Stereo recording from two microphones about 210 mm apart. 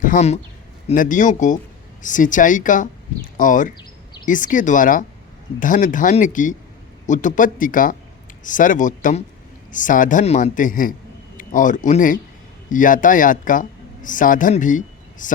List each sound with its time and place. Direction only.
0.0 s a man's voice: 35° left (ahead or behind)